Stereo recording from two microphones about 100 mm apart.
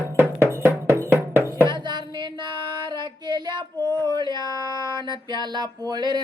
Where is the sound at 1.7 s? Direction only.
50° right (ahead or behind).